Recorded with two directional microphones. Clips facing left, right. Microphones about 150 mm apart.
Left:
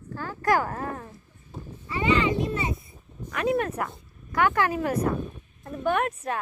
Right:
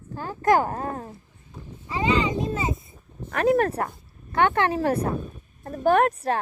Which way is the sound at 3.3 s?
40° right (ahead or behind).